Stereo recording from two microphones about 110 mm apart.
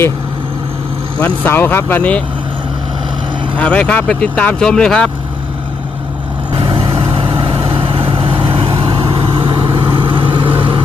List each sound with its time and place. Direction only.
1.2 s speech: 15° left (ahead or behind)
3.6 s speech: 10° left (ahead or behind)
6.5 s vehicle: 50° right (ahead or behind)